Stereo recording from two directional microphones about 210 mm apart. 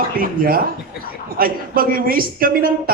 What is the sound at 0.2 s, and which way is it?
A woman's voice, 45° right (ahead or behind).